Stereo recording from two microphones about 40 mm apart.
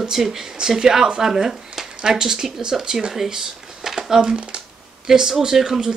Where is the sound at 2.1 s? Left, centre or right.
Centre.